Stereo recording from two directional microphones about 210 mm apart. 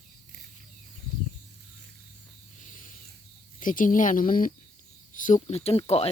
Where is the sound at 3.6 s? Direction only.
40° left (ahead or behind).